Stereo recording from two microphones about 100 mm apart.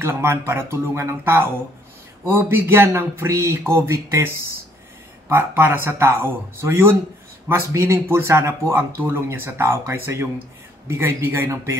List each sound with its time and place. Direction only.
0.0 s speech: 25° right (ahead or behind)
5.3 s speech: 20° right (ahead or behind)